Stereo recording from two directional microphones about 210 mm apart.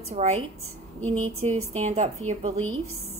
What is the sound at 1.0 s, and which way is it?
Speech, 75° right (ahead or behind).